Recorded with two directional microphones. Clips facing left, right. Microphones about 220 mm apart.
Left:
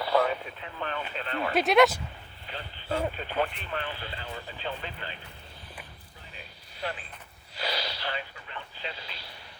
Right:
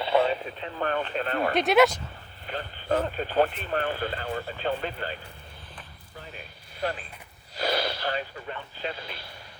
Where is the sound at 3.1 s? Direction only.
40° right (ahead or behind).